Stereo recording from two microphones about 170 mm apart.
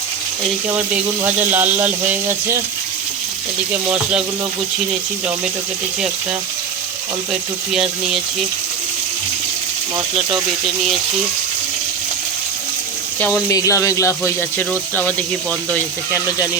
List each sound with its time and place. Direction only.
1.2 s speech: 10° right (ahead or behind)
7.7 s speech: 5° right (ahead or behind)
13.1 s speech: 10° left (ahead or behind)